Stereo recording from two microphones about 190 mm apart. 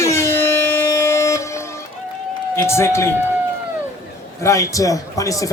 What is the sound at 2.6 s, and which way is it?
Speech, 15° left (ahead or behind).